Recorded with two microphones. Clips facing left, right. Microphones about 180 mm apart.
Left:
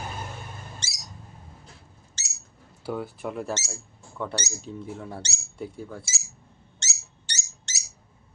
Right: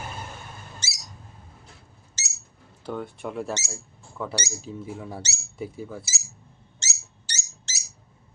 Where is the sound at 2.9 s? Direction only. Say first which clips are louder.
Left 1 dB; 5° left (ahead or behind).